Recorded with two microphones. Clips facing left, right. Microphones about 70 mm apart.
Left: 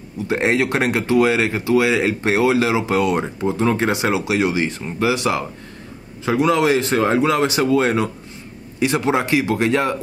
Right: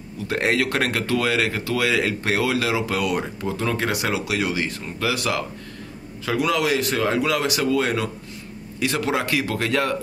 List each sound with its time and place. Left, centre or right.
0.3 s speech: left